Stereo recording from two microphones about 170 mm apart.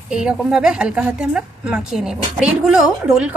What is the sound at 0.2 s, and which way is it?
A woman's voice, 5° right (ahead or behind).